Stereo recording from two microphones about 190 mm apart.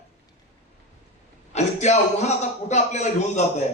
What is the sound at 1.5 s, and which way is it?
A man's voice, 35° left (ahead or behind).